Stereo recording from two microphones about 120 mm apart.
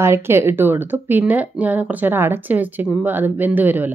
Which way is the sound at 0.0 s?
20° right (ahead or behind).